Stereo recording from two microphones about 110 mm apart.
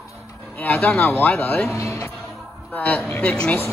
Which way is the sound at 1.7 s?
30° left (ahead or behind).